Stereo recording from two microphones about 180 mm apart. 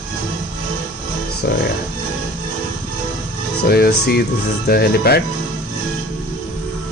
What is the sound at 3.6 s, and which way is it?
Speech, 60° left (ahead or behind).